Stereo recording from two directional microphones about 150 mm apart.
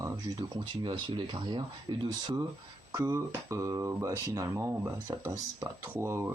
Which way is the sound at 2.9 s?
20° right (ahead or behind).